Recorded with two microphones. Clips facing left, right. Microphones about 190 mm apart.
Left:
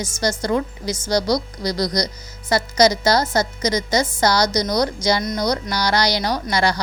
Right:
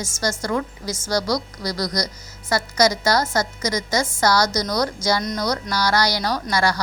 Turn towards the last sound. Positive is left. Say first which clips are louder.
# left 1 dB
turn(degrees=20)  # may be behind; listen again after turning